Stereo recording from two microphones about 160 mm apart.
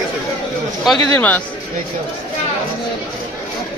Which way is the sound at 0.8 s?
5° left (ahead or behind).